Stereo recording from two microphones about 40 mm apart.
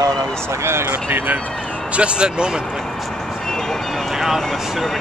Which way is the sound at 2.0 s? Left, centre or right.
Right.